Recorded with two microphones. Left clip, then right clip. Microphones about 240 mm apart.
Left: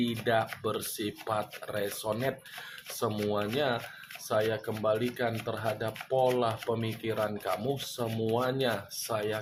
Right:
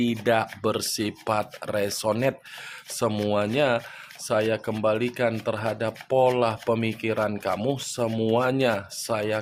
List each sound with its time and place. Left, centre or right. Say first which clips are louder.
0.0 s speech: right 6 dB; right